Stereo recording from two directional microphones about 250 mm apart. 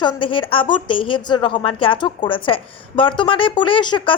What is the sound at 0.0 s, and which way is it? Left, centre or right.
A woman's voice, centre.